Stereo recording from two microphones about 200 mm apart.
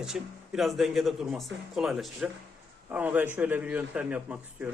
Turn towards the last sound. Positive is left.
turn(degrees=-5)  # may be behind; listen again after turning